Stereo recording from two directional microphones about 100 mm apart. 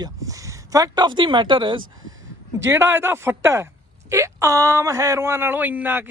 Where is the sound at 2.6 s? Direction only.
25° right (ahead or behind).